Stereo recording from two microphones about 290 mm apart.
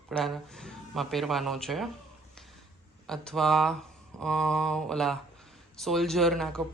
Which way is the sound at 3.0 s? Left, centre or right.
Centre.